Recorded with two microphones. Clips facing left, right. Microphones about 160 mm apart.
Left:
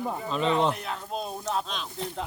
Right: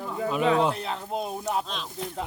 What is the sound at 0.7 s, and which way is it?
Speech, 25° right (ahead or behind).